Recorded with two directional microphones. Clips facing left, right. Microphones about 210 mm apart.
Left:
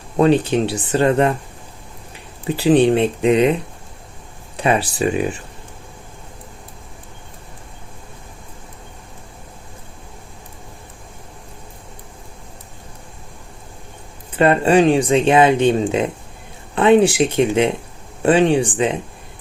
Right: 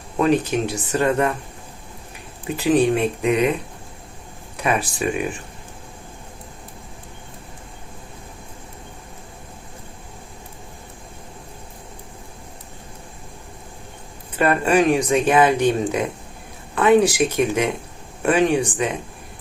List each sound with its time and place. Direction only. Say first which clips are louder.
0.2 s speech: left 4 dB; 30° left (ahead or behind)
2.6 s speech: left 4 dB; 30° left (ahead or behind)
4.5 s speech: left 4 dB; 30° left (ahead or behind)
14.3 s speech: left 4 dB; 25° left (ahead or behind)